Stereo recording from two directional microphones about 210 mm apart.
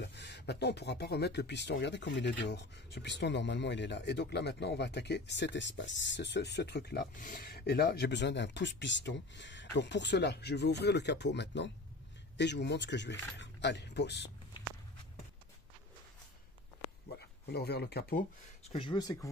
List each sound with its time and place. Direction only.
0.0 s speech: 55° left (ahead or behind)
17.5 s speech: 50° left (ahead or behind)
18.7 s speech: 25° left (ahead or behind)